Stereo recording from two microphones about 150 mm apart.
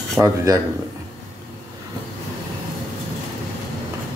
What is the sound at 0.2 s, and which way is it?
Speech, 10° right (ahead or behind).